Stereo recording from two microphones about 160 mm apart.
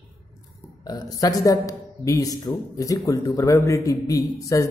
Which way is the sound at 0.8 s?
25° left (ahead or behind).